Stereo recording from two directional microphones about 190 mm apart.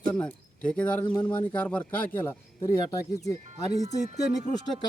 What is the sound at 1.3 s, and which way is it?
Speech, 10° left (ahead or behind).